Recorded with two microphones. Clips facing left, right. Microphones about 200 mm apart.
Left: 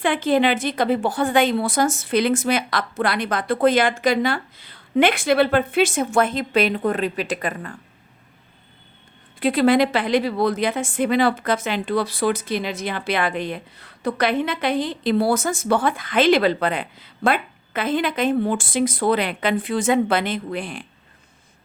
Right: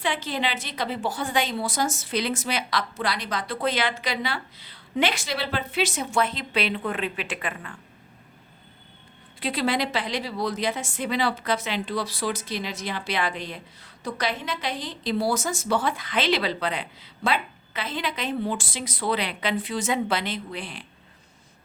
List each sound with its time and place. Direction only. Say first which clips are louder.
0.0 s a woman's voice: left 9 dB; 55° left (ahead or behind)
9.4 s a woman's voice: left 9 dB; 50° left (ahead or behind)